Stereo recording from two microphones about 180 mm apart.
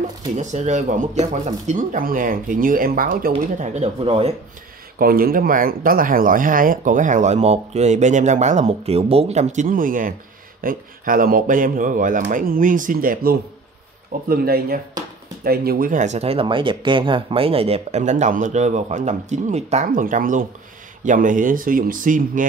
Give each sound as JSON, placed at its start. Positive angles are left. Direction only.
{"t": 0.4, "sound": "speech", "side_deg": -40}
{"t": 3.3, "sound": "speech", "side_deg": -40}
{"t": 4.9, "sound": "speech", "side_deg": -55}